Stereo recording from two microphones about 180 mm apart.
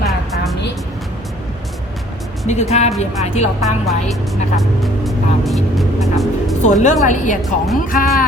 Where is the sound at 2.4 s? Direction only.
40° left (ahead or behind).